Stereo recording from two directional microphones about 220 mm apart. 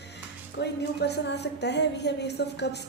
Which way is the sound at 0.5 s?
50° left (ahead or behind).